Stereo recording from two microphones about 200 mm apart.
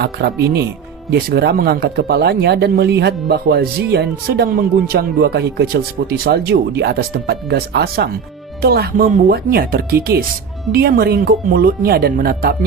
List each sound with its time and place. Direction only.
0.0 s speech: 55° right (ahead or behind)